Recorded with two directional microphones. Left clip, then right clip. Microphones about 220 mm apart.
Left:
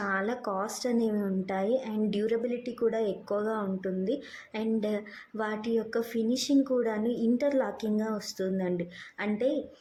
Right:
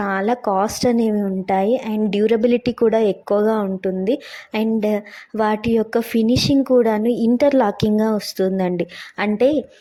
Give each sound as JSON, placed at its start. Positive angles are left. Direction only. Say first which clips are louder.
{"t": 0.0, "sound": "a woman's voice", "louder": "right 11 dB", "side_deg": -35}